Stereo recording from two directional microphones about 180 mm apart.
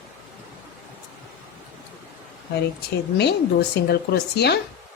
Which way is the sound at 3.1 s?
65° left (ahead or behind).